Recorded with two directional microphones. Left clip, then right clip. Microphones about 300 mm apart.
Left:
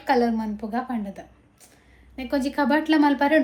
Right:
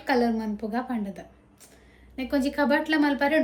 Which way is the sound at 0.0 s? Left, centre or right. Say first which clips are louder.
Left 3 dB; centre.